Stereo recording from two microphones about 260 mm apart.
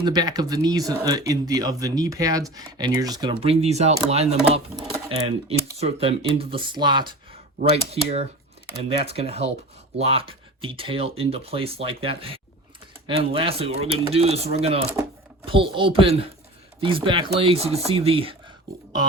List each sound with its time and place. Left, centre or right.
0.0 s speech: centre